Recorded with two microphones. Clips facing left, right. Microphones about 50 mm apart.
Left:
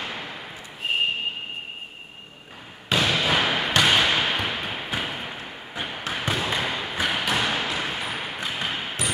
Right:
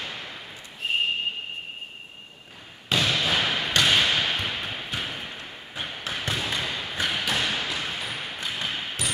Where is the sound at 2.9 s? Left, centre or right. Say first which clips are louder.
Left 2 dB; centre.